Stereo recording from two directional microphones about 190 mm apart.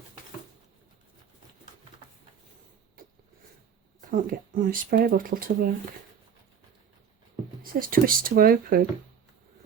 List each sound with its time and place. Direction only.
3.0 s a sound: 50° right (ahead or behind)
4.1 s speech: 45° right (ahead or behind)
7.6 s speech: 50° right (ahead or behind)